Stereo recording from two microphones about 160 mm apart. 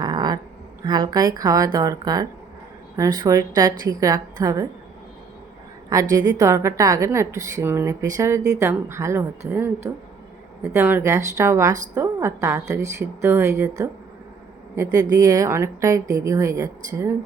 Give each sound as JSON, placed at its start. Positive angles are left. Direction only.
{"t": 0.0, "sound": "a sound", "side_deg": -25}
{"t": 0.9, "sound": "a woman's voice", "side_deg": -25}
{"t": 5.9, "sound": "a woman's voice", "side_deg": -20}
{"t": 15.1, "sound": "a woman's voice", "side_deg": -20}